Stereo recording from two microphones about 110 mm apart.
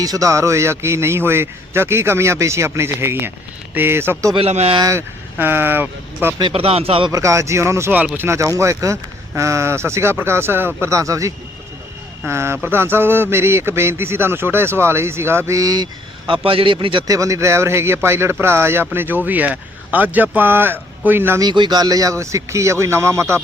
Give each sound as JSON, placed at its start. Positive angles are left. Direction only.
{"t": 0.0, "sound": "a man's voice", "side_deg": -30}
{"t": 4.4, "sound": "speech", "side_deg": -70}
{"t": 4.8, "sound": "a man's voice", "side_deg": -30}
{"t": 5.4, "sound": "a man's voice", "side_deg": -20}
{"t": 6.5, "sound": "speech", "side_deg": -65}
{"t": 7.1, "sound": "a man's voice", "side_deg": -30}
{"t": 17.1, "sound": "a man's voice", "side_deg": -30}
{"t": 21.4, "sound": "a man's voice", "side_deg": -40}